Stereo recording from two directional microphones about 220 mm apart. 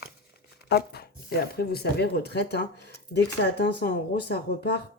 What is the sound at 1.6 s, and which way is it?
Speech, 45° left (ahead or behind).